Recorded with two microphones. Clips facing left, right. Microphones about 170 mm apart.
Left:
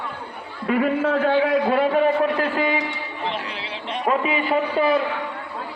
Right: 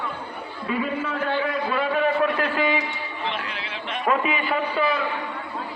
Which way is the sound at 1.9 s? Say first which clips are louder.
Left 3 dB; 35° left (ahead or behind).